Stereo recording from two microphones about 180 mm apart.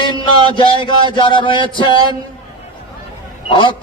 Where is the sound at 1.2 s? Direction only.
25° left (ahead or behind).